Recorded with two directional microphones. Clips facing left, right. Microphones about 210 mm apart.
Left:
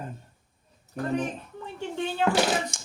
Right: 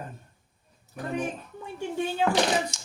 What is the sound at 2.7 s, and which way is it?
Beatboxing, 55° left (ahead or behind).